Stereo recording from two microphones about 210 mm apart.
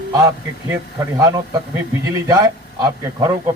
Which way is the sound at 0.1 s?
15° right (ahead or behind).